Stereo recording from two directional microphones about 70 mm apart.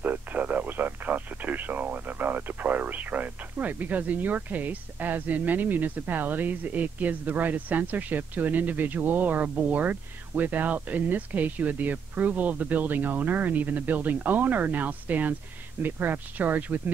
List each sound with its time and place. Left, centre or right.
0.0 s speech: right